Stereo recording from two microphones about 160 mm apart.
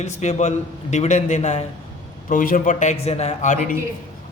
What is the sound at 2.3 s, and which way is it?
A man's voice, 60° left (ahead or behind).